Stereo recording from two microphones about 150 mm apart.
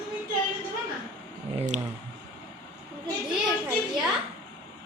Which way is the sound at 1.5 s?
55° right (ahead or behind).